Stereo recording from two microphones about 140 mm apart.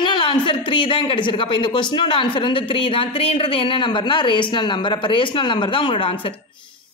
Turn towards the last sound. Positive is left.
turn(degrees=40)  # may be behind; listen again after turning